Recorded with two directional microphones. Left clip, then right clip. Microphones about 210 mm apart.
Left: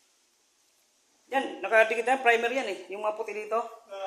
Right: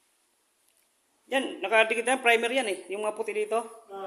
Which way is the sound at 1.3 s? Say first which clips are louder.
Even; 40° right (ahead or behind).